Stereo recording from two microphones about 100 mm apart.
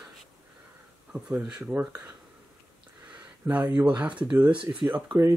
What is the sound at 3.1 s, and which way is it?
Speech, 15° right (ahead or behind).